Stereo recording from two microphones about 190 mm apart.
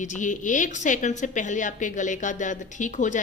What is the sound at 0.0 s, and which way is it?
A woman's voice, 40° left (ahead or behind).